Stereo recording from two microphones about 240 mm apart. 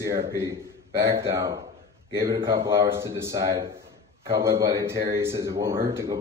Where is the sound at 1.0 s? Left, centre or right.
Centre.